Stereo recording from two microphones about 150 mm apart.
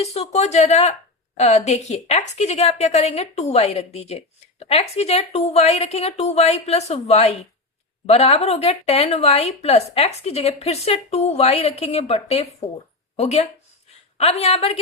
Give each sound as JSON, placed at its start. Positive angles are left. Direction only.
{"t": 0.0, "sound": "a woman's voice", "side_deg": 45}